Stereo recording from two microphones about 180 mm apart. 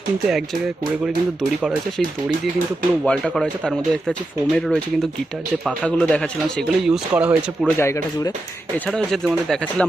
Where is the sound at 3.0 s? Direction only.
Centre (ahead or behind).